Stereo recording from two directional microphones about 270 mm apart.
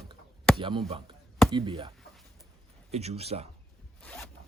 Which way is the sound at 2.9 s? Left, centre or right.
Right.